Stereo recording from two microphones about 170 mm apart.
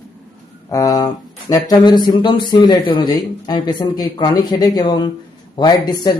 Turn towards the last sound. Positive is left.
turn(degrees=25)  # may be behind; listen again after turning